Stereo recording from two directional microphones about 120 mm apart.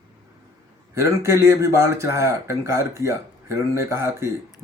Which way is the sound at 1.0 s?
25° right (ahead or behind).